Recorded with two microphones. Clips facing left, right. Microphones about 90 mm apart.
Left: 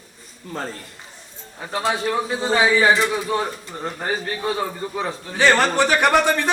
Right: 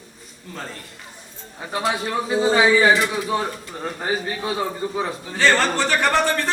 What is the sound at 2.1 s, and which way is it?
Speech, 5° right (ahead or behind).